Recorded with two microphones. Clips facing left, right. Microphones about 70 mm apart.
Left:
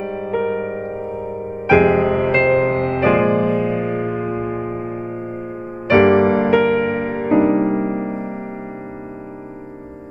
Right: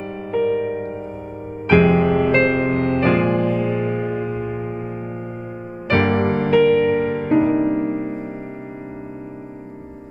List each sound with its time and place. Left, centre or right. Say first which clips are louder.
0.3 s music: right 2 dB; centre
3.0 s music: left 5 dB; centre
5.9 s music: left 6 dB; centre